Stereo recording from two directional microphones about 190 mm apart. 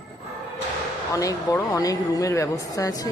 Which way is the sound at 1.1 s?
15° left (ahead or behind).